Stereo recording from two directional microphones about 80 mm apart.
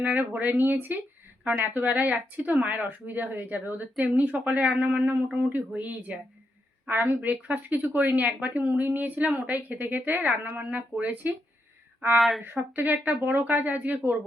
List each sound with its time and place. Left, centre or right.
0.0 s speech: right
12.4 s speech: right